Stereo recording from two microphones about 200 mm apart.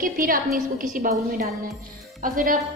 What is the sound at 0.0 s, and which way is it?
A woman's voice, 45° right (ahead or behind).